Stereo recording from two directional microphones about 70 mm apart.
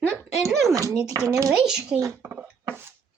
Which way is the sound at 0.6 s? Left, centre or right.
Right.